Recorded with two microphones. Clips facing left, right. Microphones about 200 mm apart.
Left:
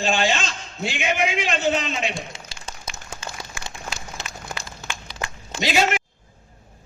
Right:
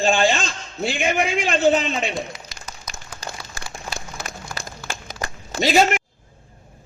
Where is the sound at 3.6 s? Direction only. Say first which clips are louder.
Right 2 dB; 35° right (ahead or behind).